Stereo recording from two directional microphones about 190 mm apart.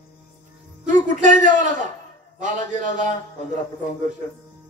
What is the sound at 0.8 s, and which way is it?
A man's voice, 40° right (ahead or behind).